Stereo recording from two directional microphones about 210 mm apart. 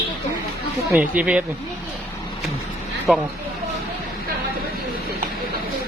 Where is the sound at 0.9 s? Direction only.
5° right (ahead or behind).